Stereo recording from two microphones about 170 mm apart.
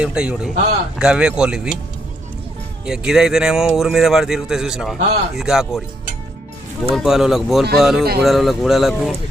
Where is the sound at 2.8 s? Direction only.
5° right (ahead or behind).